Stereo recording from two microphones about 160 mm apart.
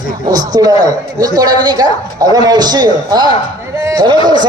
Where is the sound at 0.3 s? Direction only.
25° right (ahead or behind).